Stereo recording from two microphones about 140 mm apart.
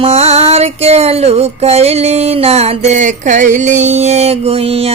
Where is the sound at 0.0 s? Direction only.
50° right (ahead or behind).